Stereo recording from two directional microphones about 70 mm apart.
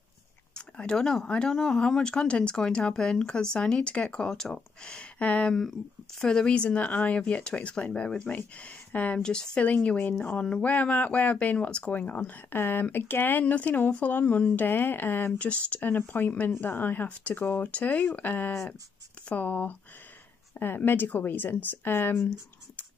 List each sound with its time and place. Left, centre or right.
0.6 s speech: centre
9.8 s speech: left
15.3 s speech: centre; by 22.3 s left